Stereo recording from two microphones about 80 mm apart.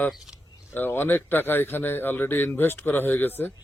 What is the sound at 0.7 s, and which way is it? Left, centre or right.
Speech, left.